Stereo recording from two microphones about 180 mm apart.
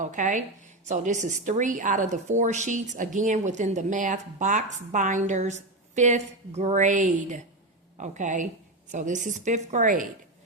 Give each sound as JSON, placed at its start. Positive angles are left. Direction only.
{"t": 0.0, "sound": "speech", "side_deg": -45}